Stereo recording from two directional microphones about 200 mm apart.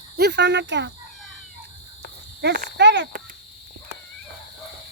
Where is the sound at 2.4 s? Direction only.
55° right (ahead or behind).